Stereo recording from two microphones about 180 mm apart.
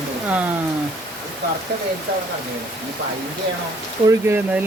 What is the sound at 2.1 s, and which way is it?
Speech, 60° right (ahead or behind).